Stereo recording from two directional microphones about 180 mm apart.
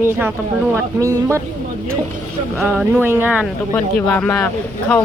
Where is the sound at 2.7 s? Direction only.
Centre (ahead or behind).